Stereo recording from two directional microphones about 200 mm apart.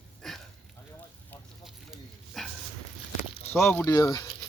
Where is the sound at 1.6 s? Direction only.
Centre (ahead or behind).